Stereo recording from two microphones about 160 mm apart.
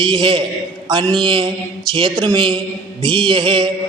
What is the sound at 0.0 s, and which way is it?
Speech, 30° right (ahead or behind).